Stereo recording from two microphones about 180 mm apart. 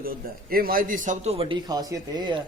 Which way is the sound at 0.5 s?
55° right (ahead or behind).